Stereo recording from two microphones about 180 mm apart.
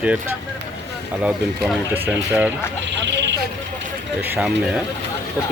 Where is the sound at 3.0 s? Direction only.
80° right.